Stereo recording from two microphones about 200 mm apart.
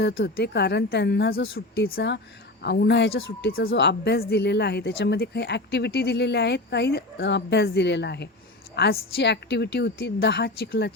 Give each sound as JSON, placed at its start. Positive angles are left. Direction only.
{"t": 0.0, "sound": "a woman's voice", "side_deg": 75}
{"t": 0.3, "sound": "a woman's voice", "side_deg": 55}